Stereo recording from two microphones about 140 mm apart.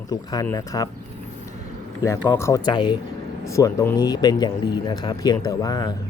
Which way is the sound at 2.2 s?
15° left (ahead or behind).